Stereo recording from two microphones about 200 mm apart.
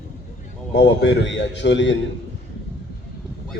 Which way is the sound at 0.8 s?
65° left (ahead or behind).